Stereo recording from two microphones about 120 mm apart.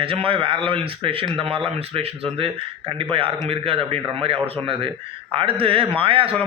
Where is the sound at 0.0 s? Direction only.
50° right (ahead or behind).